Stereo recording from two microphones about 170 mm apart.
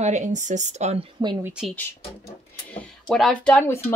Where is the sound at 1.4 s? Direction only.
5° right (ahead or behind).